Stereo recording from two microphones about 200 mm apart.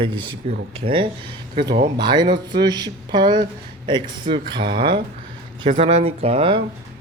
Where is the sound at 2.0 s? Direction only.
20° right (ahead or behind).